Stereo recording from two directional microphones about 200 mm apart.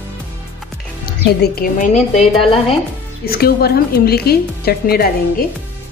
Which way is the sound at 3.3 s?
50° left (ahead or behind).